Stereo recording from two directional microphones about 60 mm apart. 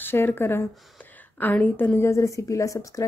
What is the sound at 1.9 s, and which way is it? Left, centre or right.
Speech, left.